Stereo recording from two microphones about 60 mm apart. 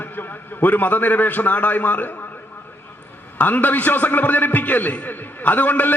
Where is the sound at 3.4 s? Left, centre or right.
Left.